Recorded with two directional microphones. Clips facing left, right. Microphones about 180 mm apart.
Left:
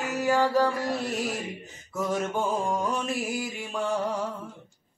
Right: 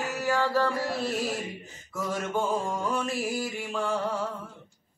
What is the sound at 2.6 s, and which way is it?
Mantra, 20° left (ahead or behind).